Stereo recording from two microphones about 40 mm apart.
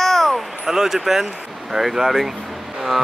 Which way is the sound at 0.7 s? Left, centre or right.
Centre.